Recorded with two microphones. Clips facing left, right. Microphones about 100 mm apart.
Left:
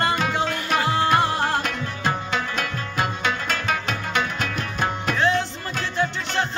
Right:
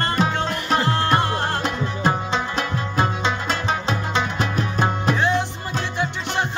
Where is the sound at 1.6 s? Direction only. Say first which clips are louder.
Right 4 dB; 25° right (ahead or behind).